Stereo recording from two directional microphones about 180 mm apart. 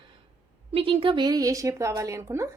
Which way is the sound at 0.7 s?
30° right (ahead or behind).